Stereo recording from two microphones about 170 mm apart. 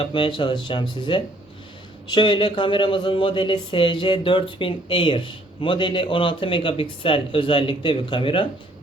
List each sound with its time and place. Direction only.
0.0 s speech: 30° left (ahead or behind)